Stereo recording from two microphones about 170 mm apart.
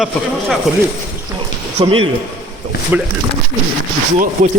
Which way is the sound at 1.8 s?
30° right (ahead or behind).